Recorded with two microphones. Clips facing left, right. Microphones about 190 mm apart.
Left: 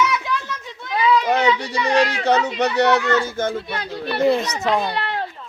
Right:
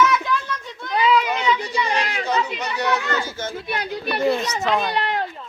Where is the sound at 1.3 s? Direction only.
70° left (ahead or behind); by 3.5 s 55° left (ahead or behind).